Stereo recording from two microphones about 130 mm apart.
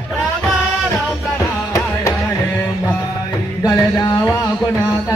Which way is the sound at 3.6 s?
30° left (ahead or behind).